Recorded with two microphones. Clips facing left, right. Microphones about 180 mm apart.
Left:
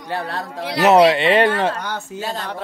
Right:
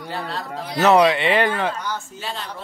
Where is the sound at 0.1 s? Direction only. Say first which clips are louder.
Left 4 dB; 60° left (ahead or behind).